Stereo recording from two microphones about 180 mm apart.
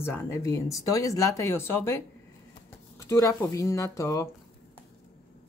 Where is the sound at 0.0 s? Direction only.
10° left (ahead or behind).